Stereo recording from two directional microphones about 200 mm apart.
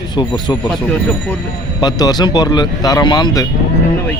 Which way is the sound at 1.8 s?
20° left (ahead or behind).